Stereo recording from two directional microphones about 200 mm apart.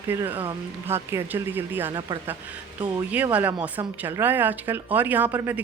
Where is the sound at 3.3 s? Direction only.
10° right (ahead or behind).